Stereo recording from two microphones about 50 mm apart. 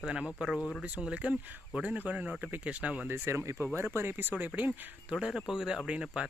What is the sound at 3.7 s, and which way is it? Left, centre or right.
Speech, right.